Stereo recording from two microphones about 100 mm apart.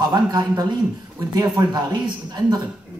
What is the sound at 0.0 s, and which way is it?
A woman's voice, 45° right (ahead or behind).